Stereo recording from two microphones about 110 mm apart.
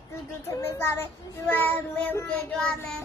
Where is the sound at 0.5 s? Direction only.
25° left (ahead or behind).